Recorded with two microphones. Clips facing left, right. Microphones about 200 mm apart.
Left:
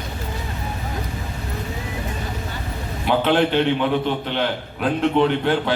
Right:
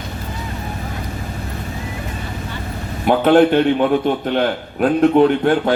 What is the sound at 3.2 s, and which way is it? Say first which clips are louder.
A man's voice: right 7 dB; 50° right (ahead or behind).